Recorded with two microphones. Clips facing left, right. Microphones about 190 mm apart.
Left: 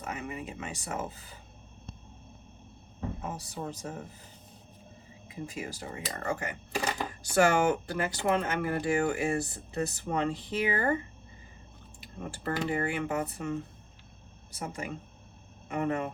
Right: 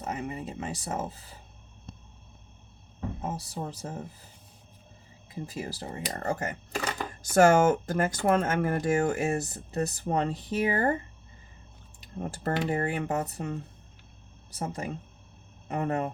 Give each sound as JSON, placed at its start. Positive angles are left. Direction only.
{"t": 0.0, "sound": "speech", "side_deg": -35}
{"t": 3.2, "sound": "speech", "side_deg": -35}
{"t": 5.3, "sound": "speech", "side_deg": -35}
{"t": 12.2, "sound": "speech", "side_deg": -40}